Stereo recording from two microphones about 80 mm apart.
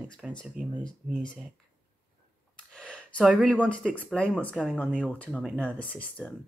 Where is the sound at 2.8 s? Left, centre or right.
Centre.